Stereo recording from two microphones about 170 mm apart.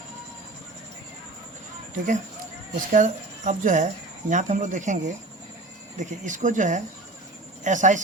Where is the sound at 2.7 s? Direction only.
50° right (ahead or behind).